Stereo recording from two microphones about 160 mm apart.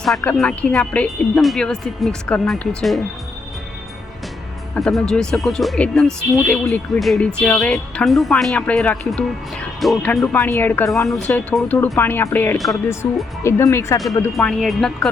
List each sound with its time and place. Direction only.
0.3 s speech: 5° left (ahead or behind)
4.7 s speech: centre (ahead or behind)
10.3 s speech: 15° left (ahead or behind)
10.8 s speech: centre (ahead or behind)
12.5 s speech: centre (ahead or behind)
13.4 s speech: 15° left (ahead or behind)
14.3 s speech: 5° left (ahead or behind)